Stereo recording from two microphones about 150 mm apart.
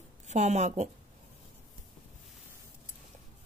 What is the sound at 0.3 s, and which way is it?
Speech, 50° right (ahead or behind).